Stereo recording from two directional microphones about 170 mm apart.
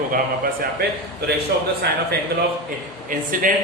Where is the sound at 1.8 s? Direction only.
75° right (ahead or behind).